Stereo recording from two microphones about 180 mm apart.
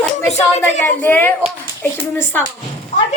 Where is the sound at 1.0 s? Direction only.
10° left (ahead or behind).